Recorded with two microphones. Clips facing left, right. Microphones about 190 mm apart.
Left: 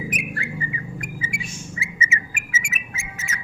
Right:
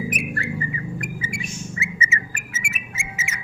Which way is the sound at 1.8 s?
20° left (ahead or behind).